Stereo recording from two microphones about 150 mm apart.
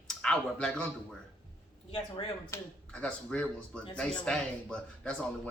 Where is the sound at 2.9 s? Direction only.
5° left (ahead or behind).